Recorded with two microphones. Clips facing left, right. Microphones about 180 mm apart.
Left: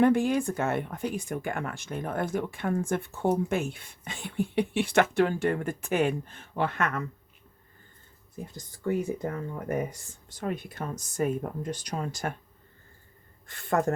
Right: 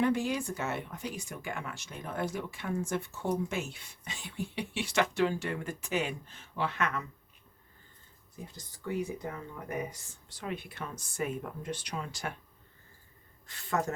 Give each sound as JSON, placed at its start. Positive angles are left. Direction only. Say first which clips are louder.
{"t": 0.0, "sound": "speech", "louder": "left 7 dB", "side_deg": 55}
{"t": 8.5, "sound": "speech", "louder": "left 6 dB", "side_deg": 50}
{"t": 13.5, "sound": "speech", "louder": "left 6 dB", "side_deg": 55}